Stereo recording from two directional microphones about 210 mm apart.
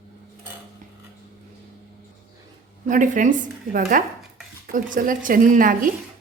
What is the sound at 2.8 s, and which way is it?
A woman's voice, 40° right (ahead or behind).